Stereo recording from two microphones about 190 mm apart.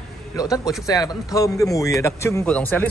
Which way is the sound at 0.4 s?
15° left (ahead or behind).